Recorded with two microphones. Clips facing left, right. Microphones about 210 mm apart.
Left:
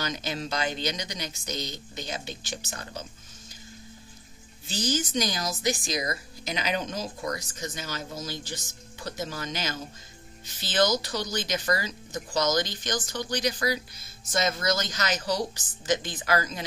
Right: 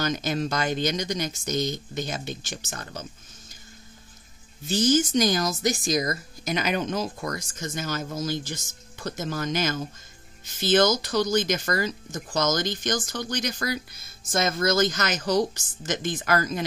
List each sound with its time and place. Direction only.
0.0 s speech: 50° right (ahead or behind)
4.6 s speech: 50° right (ahead or behind)